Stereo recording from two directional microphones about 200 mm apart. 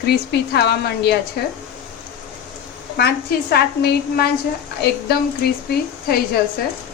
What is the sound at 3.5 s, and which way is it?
Speech, 50° left (ahead or behind).